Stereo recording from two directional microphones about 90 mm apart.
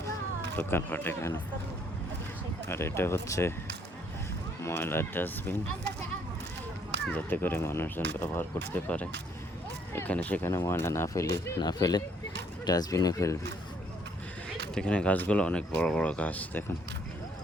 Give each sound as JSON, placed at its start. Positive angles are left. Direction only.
{"t": 0.5, "sound": "speech", "side_deg": 25}
{"t": 2.6, "sound": "speech", "side_deg": 30}
{"t": 4.6, "sound": "speech", "side_deg": 25}
{"t": 7.1, "sound": "speech", "side_deg": 20}
{"t": 10.4, "sound": "speech", "side_deg": 30}
{"t": 11.6, "sound": "speech", "side_deg": 50}
{"t": 14.8, "sound": "speech", "side_deg": 10}